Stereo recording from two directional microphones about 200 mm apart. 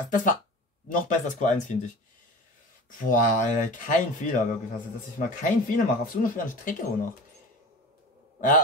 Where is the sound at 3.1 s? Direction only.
40° left (ahead or behind).